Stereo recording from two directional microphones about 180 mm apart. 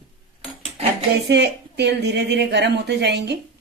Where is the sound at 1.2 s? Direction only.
70° right (ahead or behind).